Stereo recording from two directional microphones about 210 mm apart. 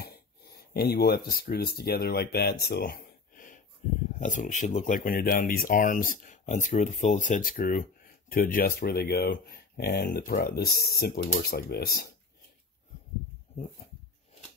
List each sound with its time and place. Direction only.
0.7 s speech: 50° left (ahead or behind)